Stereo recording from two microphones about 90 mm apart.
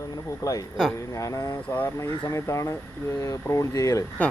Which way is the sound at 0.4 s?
35° left (ahead or behind).